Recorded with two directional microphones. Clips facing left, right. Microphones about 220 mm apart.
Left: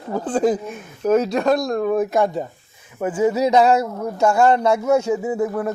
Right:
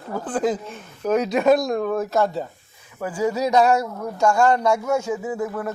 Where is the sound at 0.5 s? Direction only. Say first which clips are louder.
Left 4 dB; 10° left (ahead or behind).